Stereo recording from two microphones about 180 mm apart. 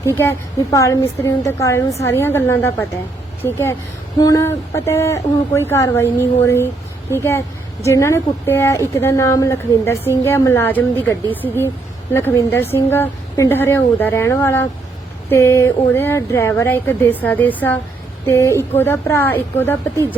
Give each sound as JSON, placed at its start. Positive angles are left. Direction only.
{"t": 0.0, "sound": "a woman's voice", "side_deg": 15}